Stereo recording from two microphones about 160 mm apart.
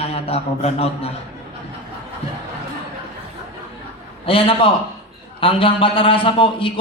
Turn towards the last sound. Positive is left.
turn(degrees=35)  # may be behind; listen again after turning